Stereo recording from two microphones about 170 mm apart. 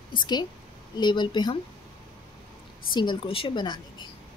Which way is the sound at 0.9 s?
25° left (ahead or behind).